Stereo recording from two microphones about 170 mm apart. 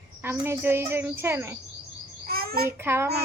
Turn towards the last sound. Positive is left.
turn(degrees=-15)  # may be behind; listen again after turning